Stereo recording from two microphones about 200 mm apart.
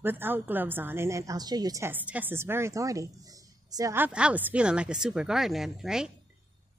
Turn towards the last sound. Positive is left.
turn(degrees=-5)  # may be behind; listen again after turning